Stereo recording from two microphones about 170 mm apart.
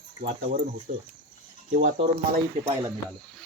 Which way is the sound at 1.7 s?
55° right (ahead or behind).